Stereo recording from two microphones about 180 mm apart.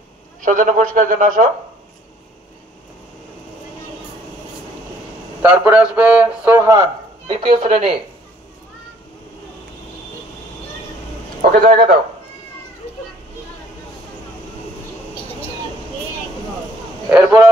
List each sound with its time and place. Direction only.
0.4 s a man's voice: 45° right (ahead or behind)
5.4 s speech: 10° right (ahead or behind)
7.2 s a woman's voice: 30° right (ahead or behind)
11.6 s a man's voice: 50° right (ahead or behind)
17.1 s speech: 5° right (ahead or behind)